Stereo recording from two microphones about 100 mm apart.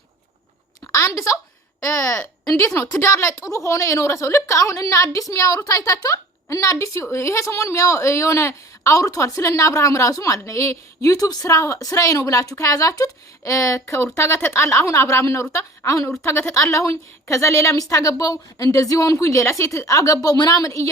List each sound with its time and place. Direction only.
0.9 s a woman's voice: 30° left (ahead or behind)